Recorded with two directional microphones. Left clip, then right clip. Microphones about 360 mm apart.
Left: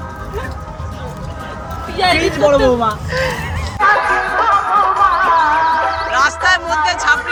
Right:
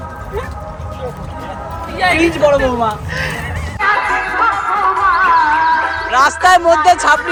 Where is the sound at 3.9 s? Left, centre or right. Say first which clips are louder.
Right 1 dB; centre.